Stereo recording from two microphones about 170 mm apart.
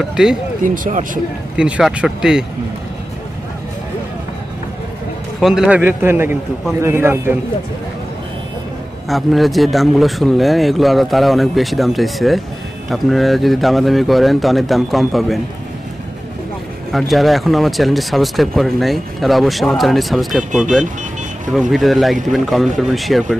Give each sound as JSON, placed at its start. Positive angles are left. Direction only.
{"t": 0.0, "sound": "speech", "side_deg": -5}
{"t": 0.7, "sound": "speech", "side_deg": -50}
{"t": 1.6, "sound": "speech", "side_deg": -5}
{"t": 5.4, "sound": "a man's voice", "side_deg": -5}
{"t": 9.1, "sound": "speech", "side_deg": 0}
{"t": 16.9, "sound": "speech", "side_deg": 0}